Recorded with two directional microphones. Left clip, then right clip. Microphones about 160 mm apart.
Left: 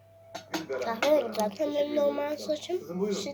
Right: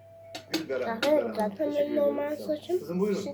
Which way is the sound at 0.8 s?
Centre (ahead or behind).